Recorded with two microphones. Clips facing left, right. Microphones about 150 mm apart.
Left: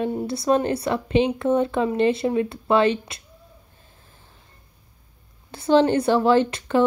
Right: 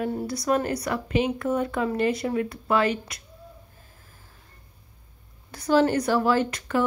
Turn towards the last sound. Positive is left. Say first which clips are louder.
# left 5 dB
turn(degrees=25)  # may be behind; listen again after turning